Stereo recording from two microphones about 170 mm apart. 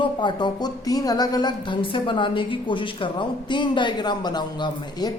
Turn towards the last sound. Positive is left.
turn(degrees=25)  # may be behind; listen again after turning